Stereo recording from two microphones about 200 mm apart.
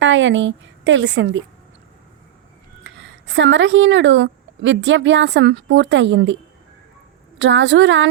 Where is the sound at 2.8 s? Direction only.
65° right (ahead or behind).